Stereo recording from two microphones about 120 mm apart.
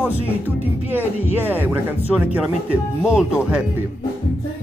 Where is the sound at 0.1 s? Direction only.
60° left (ahead or behind).